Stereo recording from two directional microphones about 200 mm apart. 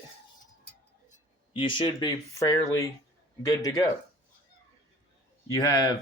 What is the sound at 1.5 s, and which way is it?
Speech, 25° left (ahead or behind).